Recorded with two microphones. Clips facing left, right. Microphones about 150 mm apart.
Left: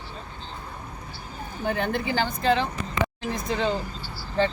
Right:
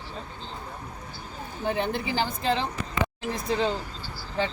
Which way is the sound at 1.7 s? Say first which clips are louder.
Left 1 dB; 30° right (ahead or behind).